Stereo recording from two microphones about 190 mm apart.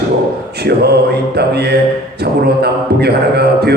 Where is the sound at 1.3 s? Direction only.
60° right (ahead or behind).